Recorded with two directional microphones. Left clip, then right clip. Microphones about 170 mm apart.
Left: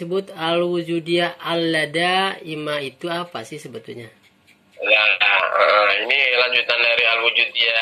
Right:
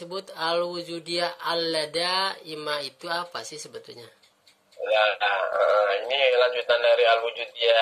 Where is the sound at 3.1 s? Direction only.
40° right (ahead or behind).